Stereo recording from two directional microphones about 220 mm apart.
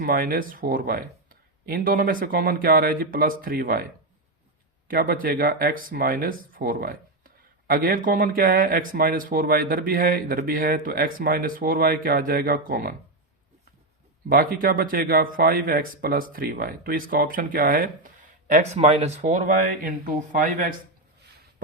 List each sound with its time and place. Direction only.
0.0 s speech: 40° right (ahead or behind)
4.9 s speech: 40° right (ahead or behind)
14.3 s speech: 40° right (ahead or behind)